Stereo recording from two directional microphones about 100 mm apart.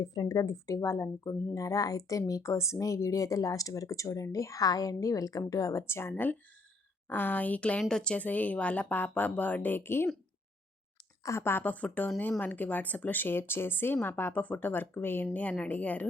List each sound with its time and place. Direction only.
0.0 s speech: 40° left (ahead or behind); by 10.1 s 25° left (ahead or behind)
11.2 s speech: 30° left (ahead or behind)